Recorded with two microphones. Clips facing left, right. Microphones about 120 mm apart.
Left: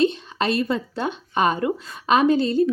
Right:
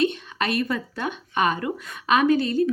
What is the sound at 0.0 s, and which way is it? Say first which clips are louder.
Speech: left 3 dB; 30° left (ahead or behind).